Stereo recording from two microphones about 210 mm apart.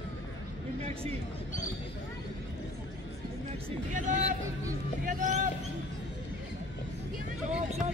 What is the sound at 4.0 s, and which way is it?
A man's voice, 35° right (ahead or behind).